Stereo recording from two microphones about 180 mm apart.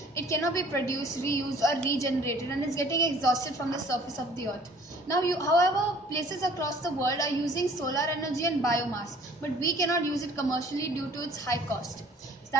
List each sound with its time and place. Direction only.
0.2 s a woman's voice: 15° left (ahead or behind)
5.0 s a woman's voice: 20° left (ahead or behind)